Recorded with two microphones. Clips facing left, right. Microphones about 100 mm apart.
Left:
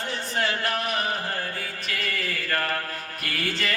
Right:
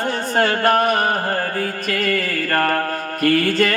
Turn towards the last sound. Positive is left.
turn(degrees=-45)  # may be behind; listen again after turning